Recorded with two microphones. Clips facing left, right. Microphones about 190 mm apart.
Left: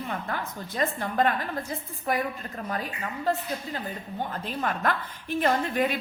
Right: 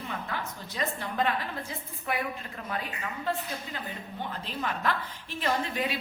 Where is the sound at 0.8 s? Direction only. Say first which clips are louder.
Left 5 dB; 50° left (ahead or behind).